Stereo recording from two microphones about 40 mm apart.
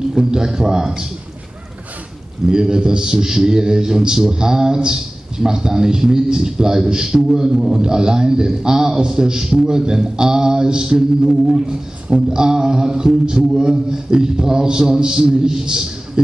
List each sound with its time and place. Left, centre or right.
0.1 s a man's voice: centre
2.4 s a man's voice: centre